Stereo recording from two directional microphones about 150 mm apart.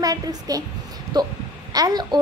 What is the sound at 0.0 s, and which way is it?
A woman's voice, 25° right (ahead or behind).